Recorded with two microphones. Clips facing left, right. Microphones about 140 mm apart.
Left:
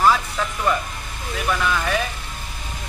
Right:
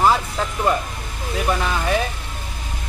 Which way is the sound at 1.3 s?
30° right (ahead or behind).